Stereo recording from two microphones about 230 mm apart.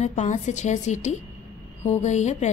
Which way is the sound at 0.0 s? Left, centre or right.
Left.